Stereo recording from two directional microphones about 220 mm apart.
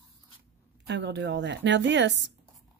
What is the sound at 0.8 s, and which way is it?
Speech, 50° right (ahead or behind).